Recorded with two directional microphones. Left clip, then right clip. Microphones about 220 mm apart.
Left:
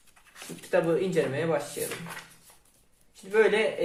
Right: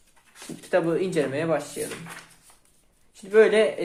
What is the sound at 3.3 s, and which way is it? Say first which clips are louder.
Speech: right 5 dB; 45° right (ahead or behind).